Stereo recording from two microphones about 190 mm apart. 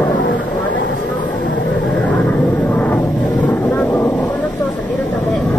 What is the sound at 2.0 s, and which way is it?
Vehicle, 5° left (ahead or behind).